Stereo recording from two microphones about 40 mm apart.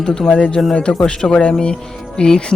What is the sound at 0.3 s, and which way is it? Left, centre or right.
A man's voice, left.